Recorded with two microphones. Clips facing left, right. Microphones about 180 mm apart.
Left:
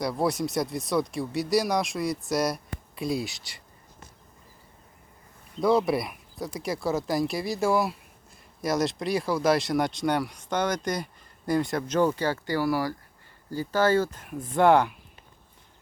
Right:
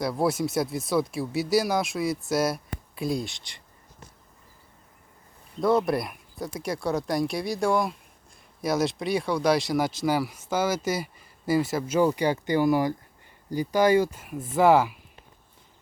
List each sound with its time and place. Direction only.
0.0 s speech: centre (ahead or behind)
5.5 s speech: centre (ahead or behind)